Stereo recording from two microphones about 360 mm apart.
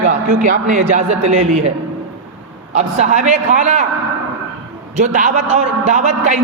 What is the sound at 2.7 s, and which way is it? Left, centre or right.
A man's voice, centre.